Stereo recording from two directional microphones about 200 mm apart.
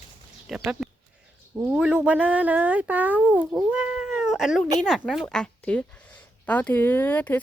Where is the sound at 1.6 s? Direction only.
10° right (ahead or behind).